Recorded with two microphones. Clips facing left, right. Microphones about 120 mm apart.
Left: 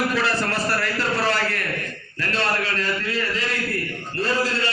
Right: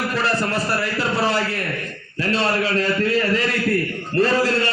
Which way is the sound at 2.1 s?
30° right (ahead or behind).